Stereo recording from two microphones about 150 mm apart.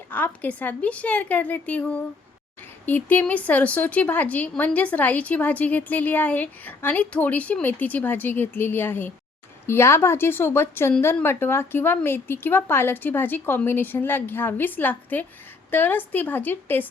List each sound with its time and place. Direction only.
0.1 s a woman's voice: 10° left (ahead or behind)